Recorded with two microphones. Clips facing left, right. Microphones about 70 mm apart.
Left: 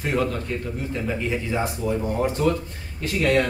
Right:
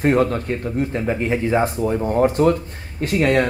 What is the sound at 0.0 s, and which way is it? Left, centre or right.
Speech, right.